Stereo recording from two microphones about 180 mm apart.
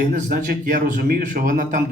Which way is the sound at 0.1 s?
50° right (ahead or behind).